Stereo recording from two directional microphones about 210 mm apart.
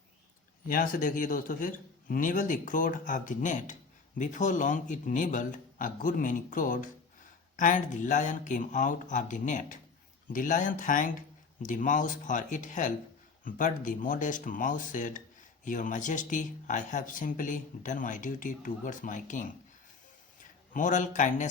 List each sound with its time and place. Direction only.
0.7 s speech: 40° left (ahead or behind)
20.7 s speech: 35° left (ahead or behind)